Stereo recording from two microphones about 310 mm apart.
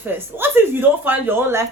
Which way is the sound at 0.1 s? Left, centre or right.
Centre.